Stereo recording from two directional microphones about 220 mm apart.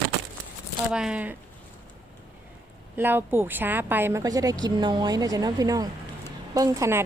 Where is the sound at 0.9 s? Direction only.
5° right (ahead or behind).